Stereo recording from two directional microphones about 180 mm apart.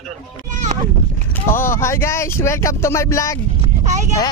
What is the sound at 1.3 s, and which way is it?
Speech, 15° left (ahead or behind).